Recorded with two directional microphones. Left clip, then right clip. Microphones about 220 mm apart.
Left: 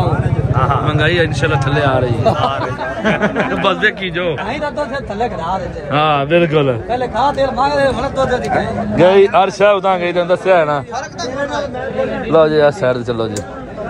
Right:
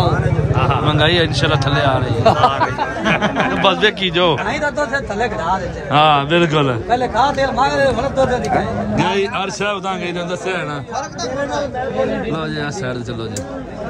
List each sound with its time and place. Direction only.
0.6 s speech: centre (ahead or behind)
4.5 s speech: 45° right (ahead or behind)
5.9 s speech: centre (ahead or behind)
6.9 s speech: 45° right (ahead or behind)
8.9 s speech: centre (ahead or behind)
12.3 s speech: 5° right (ahead or behind)